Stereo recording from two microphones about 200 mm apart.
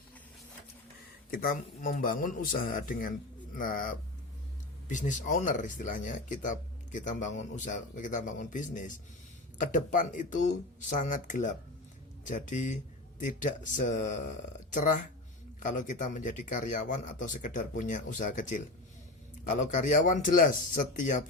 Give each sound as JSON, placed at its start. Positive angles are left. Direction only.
{"t": 1.3, "sound": "a man's voice", "side_deg": 45}